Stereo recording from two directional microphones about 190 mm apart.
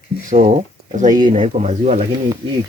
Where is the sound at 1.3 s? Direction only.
30° right (ahead or behind).